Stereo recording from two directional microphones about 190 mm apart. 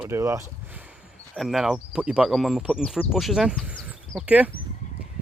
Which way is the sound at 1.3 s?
Centre (ahead or behind).